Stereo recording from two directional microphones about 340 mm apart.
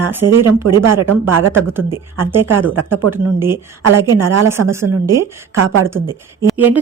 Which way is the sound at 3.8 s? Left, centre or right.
Right.